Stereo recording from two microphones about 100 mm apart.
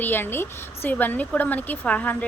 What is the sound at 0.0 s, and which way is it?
Speech, 20° left (ahead or behind).